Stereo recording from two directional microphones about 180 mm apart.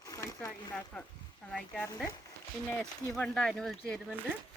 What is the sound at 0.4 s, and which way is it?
Speech, 10° left (ahead or behind).